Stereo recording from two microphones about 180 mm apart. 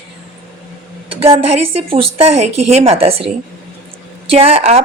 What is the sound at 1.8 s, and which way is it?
Speech, 35° right (ahead or behind).